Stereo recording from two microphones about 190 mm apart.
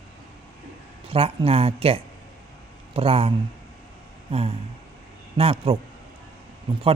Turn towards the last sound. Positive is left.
turn(degrees=-30)  # may be behind; listen again after turning